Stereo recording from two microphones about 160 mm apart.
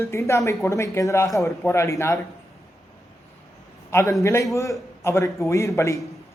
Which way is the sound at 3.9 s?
15° left (ahead or behind).